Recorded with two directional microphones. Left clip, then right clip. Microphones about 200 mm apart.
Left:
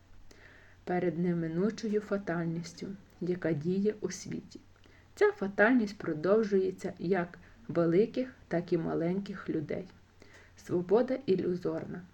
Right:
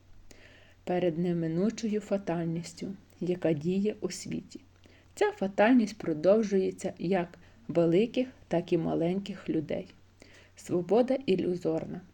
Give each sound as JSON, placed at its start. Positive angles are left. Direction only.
{"t": 0.9, "sound": "speech", "side_deg": -30}